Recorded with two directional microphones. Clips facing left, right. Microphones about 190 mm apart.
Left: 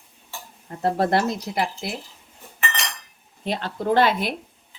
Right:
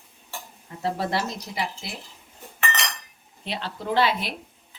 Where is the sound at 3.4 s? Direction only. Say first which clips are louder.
Left 6 dB; 50° left (ahead or behind).